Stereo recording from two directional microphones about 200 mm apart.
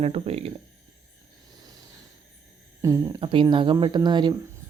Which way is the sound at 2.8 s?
15° right (ahead or behind).